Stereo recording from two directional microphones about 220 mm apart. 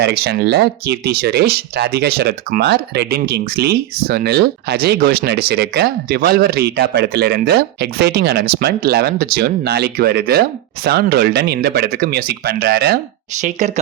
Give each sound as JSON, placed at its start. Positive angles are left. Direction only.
{"t": 0.0, "sound": "speech", "side_deg": -45}